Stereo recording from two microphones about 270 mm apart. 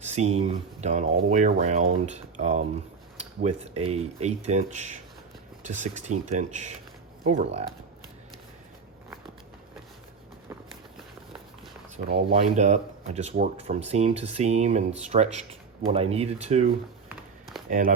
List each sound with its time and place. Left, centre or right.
0.0 s a sound: right
0.3 s speech: right
12.0 s speech: right